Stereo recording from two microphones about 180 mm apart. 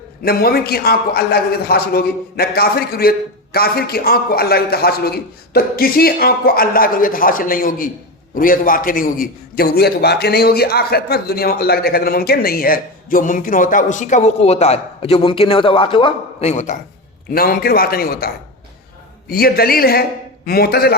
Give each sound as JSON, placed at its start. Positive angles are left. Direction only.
{"t": 0.2, "sound": "a man's voice", "side_deg": 60}
{"t": 17.3, "sound": "a man's voice", "side_deg": 55}
{"t": 19.3, "sound": "a man's voice", "side_deg": 55}